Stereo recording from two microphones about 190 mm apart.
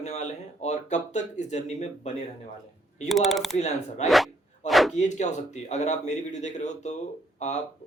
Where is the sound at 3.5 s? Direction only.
35° left (ahead or behind).